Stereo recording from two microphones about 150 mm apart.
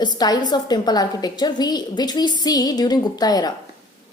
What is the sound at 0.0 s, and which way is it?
A woman's voice, 25° left (ahead or behind).